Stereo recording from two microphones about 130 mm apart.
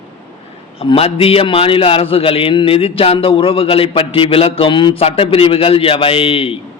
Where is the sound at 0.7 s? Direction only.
45° left (ahead or behind).